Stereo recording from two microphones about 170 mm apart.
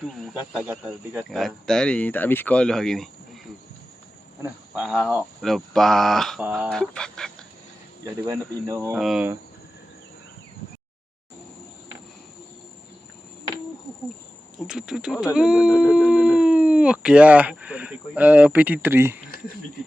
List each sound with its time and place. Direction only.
0.2 s speech: centre (ahead or behind)
4.4 s speech: 5° right (ahead or behind)
8.0 s speech: 20° right (ahead or behind)
9.0 s speech: centre (ahead or behind)
14.6 s speech: 5° right (ahead or behind)